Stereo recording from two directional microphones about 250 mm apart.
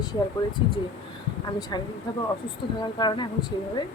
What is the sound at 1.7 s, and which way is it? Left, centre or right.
Speech, centre.